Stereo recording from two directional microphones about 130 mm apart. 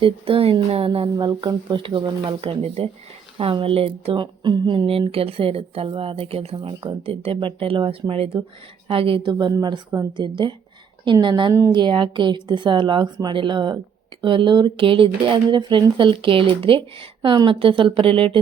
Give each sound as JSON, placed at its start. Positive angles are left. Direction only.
{"t": 0.0, "sound": "speech", "side_deg": -45}
{"t": 1.1, "sound": "speech", "side_deg": -30}
{"t": 1.4, "sound": "speech", "side_deg": -40}